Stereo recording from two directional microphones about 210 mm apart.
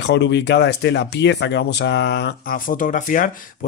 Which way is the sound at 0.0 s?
55° left (ahead or behind).